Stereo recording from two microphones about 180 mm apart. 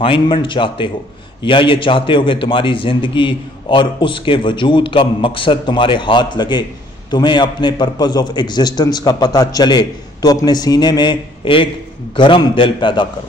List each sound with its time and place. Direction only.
0.0 s a man's voice: 30° left (ahead or behind)